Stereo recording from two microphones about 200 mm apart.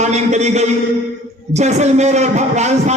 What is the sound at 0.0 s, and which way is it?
A man's voice, 35° right (ahead or behind).